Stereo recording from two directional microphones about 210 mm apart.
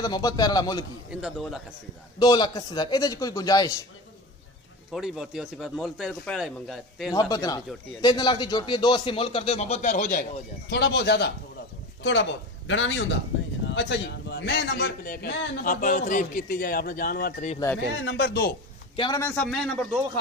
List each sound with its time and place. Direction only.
0.0 s speech: 20° left (ahead or behind)
1.2 s speech: centre (ahead or behind)
2.1 s a man's voice: 20° left (ahead or behind)
4.9 s speech: centre (ahead or behind)
7.1 s speech: 15° left (ahead or behind); by 10.2 s 40° left (ahead or behind)
10.7 s a man's voice: 50° left (ahead or behind)
17.9 s speech: 55° left (ahead or behind)
18.9 s speech: 20° left (ahead or behind)
19.2 s speech: 5° left (ahead or behind)